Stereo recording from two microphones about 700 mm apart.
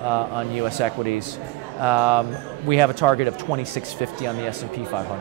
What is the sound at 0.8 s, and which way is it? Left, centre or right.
Speech, right.